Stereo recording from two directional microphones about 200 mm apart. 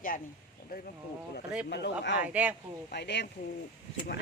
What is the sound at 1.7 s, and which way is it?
Speech, 60° left (ahead or behind).